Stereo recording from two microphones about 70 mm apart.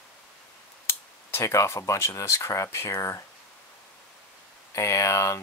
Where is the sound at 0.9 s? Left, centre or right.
Left.